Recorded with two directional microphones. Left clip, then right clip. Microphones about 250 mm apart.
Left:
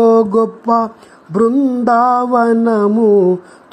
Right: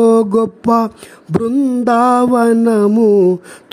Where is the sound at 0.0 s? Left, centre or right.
Right.